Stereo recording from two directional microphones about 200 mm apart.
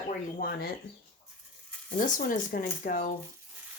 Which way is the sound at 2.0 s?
40° left (ahead or behind).